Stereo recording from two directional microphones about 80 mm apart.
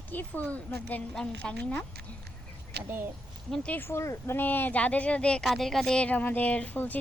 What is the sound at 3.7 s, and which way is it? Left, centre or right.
Speech, left.